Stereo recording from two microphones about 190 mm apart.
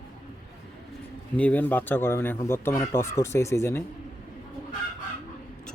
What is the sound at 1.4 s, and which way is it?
Speech, 10° left (ahead or behind).